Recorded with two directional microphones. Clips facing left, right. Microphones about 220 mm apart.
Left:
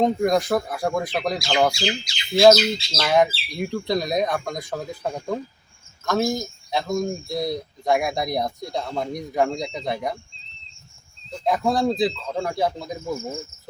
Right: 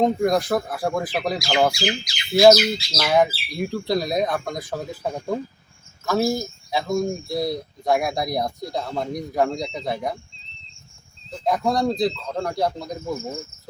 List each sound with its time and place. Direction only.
0.0 s speech: centre (ahead or behind)
1.9 s speech: 25° left (ahead or behind)
2.3 s speech: 10° right (ahead or behind)
11.3 s speech: 5° left (ahead or behind)